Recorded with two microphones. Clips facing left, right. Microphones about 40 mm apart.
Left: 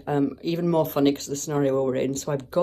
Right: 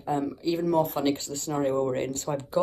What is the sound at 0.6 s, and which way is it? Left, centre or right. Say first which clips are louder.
Speech: left 2 dB; left.